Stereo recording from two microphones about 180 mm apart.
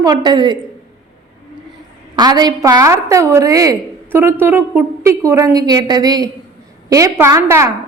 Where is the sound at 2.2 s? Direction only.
20° right (ahead or behind).